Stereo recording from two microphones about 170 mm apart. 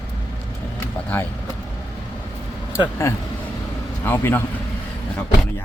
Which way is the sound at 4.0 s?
10° left (ahead or behind).